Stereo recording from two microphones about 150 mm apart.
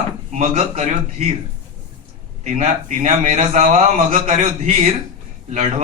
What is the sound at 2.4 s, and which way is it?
A man's voice, 50° right (ahead or behind).